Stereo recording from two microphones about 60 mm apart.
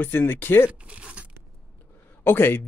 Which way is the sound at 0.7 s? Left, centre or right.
Right.